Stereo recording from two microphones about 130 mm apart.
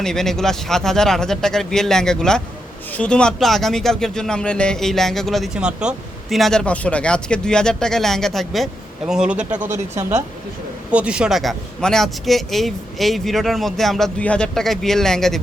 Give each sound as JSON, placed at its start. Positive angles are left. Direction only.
{"t": 0.0, "sound": "speech", "side_deg": 5}
{"t": 9.6, "sound": "speech", "side_deg": -20}
{"t": 10.9, "sound": "speech", "side_deg": -10}